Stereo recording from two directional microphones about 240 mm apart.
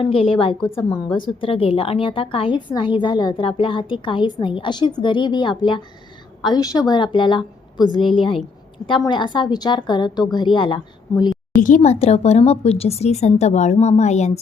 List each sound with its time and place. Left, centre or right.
0.0 s a woman's voice: left
0.6 s a woman's voice: centre
1.0 s a woman's voice: left
11.5 s a woman's voice: left